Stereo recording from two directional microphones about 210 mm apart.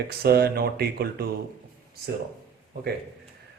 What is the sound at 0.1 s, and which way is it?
Speech, 50° right (ahead or behind).